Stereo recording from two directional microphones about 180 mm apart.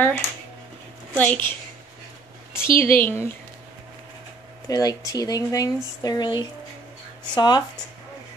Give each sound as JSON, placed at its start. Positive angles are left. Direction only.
{"t": 0.0, "sound": "a woman's voice", "side_deg": 10}
{"t": 2.6, "sound": "a woman's voice", "side_deg": 15}
{"t": 4.6, "sound": "speech", "side_deg": 20}